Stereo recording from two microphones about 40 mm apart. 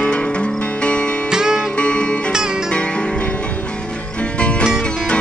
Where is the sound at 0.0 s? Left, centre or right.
Left.